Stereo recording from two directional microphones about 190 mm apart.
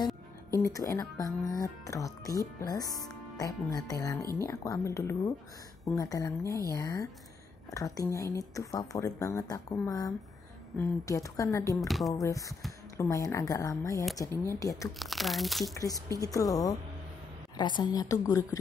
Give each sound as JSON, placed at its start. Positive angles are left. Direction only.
{"t": 0.0, "sound": "speech", "side_deg": 15}
{"t": 15.0, "sound": "speech", "side_deg": 0}
{"t": 15.6, "sound": "a woman's voice", "side_deg": 20}